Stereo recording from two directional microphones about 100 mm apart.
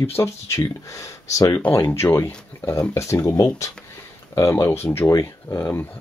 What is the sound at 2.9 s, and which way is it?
Speech, 30° left (ahead or behind).